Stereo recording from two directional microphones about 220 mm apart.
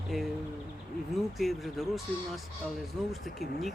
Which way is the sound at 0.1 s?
Centre (ahead or behind).